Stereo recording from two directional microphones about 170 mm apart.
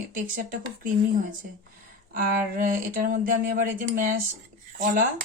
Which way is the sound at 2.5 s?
55° right (ahead or behind).